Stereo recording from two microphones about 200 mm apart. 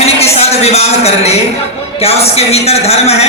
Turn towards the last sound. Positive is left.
turn(degrees=30)  # may be behind; listen again after turning